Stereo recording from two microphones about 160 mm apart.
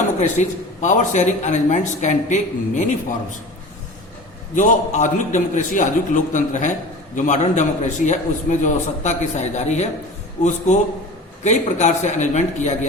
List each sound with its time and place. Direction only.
0.2 s a man's voice: 50° left (ahead or behind)
4.5 s a man's voice: 50° left (ahead or behind)